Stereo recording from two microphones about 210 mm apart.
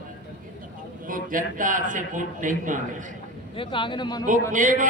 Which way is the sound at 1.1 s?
40° right (ahead or behind).